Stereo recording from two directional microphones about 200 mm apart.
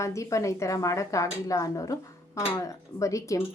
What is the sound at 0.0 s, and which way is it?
A woman's voice, 15° left (ahead or behind).